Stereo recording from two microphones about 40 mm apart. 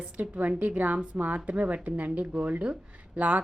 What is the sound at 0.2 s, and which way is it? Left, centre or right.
Speech, right.